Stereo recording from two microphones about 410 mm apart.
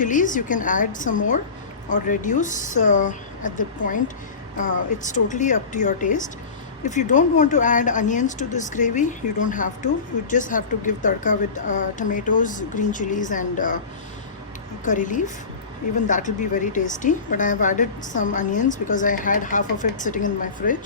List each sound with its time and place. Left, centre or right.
0.0 s a woman's voice: centre
14.8 s a woman's voice: centre